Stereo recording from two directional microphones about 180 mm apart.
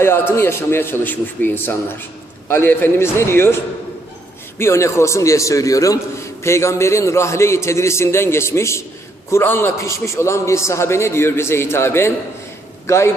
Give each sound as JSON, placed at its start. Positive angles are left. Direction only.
{"t": 0.0, "sound": "a man's voice", "side_deg": 15}